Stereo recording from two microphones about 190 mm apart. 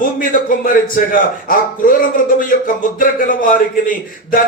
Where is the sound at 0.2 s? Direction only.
45° left (ahead or behind).